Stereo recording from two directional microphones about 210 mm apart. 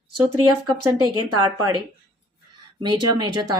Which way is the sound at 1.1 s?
90° right.